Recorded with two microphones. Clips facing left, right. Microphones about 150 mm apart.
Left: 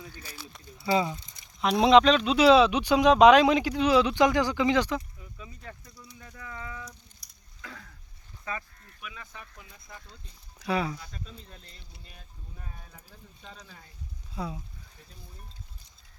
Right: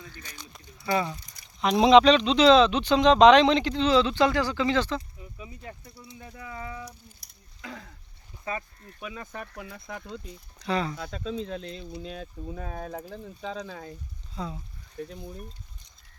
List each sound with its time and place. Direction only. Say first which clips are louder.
0.0 s a sound: left 1 dB; 10° left (ahead or behind)
0.9 s a sound: left 1 dB; 20° left (ahead or behind)
1.6 s speech: right 2 dB; centre (ahead or behind)
5.8 s speech: right 4 dB; 30° right (ahead or behind)
8.4 s speech: right 4 dB; 30° right (ahead or behind)
9.2 s speech: right 9 dB; 50° right (ahead or behind)
9.6 s speech: right 10 dB; 65° right (ahead or behind)
10.6 s speech: even; 10° left (ahead or behind)
10.9 s speech: right 12 dB; 65° right (ahead or behind)
11.9 s speech: right 17 dB; 90° right; by 13.9 s 65° right (ahead or behind)
14.3 s speech: even; 10° left (ahead or behind)
15.0 s speech: right 15 dB; 65° right (ahead or behind)